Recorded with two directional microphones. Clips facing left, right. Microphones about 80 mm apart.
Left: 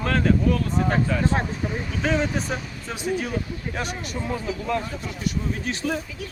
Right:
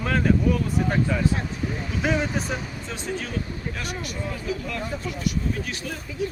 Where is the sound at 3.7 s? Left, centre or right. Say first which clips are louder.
Left 5 dB; left.